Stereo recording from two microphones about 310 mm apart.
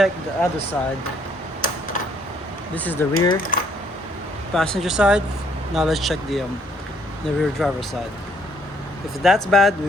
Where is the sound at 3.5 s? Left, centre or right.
Left.